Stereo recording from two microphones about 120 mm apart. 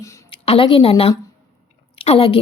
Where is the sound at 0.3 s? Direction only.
50° left (ahead or behind).